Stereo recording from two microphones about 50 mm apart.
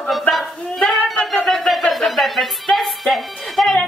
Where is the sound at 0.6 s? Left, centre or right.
Centre.